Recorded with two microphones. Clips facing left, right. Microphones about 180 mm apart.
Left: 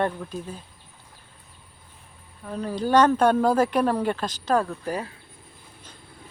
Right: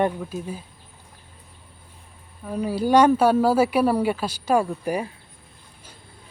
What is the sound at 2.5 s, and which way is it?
Speech, 10° right (ahead or behind).